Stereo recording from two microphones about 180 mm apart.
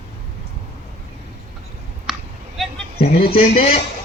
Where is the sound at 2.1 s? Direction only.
Centre (ahead or behind).